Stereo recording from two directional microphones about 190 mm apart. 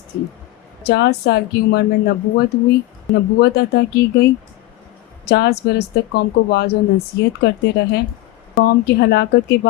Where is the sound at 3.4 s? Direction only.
60° left (ahead or behind).